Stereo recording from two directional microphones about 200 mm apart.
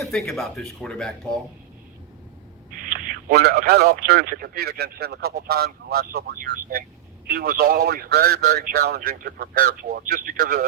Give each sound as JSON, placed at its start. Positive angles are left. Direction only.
{"t": 0.0, "sound": "speech", "side_deg": 0}
{"t": 2.8, "sound": "speech", "side_deg": -45}